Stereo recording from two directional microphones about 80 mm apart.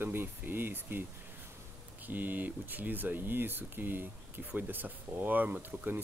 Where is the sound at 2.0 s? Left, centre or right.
Right.